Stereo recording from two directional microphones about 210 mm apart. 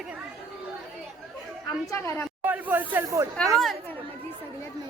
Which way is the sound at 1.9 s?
15° left (ahead or behind).